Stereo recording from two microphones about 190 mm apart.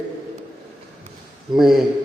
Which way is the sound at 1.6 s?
Centre (ahead or behind).